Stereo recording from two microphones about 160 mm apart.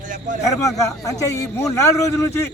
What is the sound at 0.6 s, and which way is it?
Speech, 20° left (ahead or behind).